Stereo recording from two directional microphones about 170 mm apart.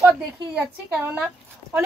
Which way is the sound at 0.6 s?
10° right (ahead or behind).